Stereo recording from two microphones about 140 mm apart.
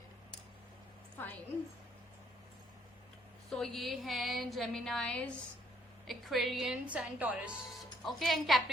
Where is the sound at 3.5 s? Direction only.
Centre (ahead or behind).